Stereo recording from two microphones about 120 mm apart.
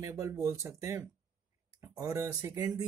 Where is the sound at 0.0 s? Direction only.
25° right (ahead or behind).